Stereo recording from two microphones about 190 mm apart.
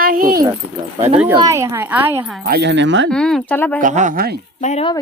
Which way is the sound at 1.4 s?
15° right (ahead or behind).